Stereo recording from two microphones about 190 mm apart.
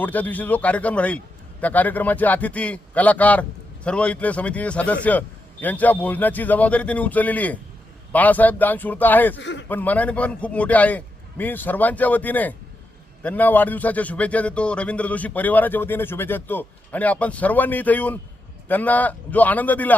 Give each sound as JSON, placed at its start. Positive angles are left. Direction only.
{"t": 0.0, "sound": "a man's voice", "side_deg": 10}
{"t": 9.4, "sound": "speech", "side_deg": 70}
{"t": 9.6, "sound": "a man's voice", "side_deg": 10}